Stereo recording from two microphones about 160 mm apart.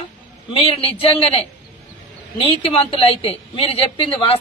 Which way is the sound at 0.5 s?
35° left (ahead or behind).